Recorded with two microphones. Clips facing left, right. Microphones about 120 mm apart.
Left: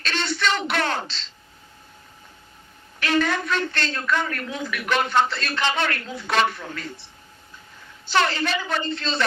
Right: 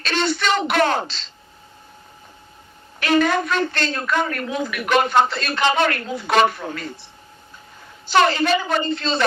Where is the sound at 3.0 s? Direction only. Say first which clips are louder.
Right 5 dB; 15° right (ahead or behind).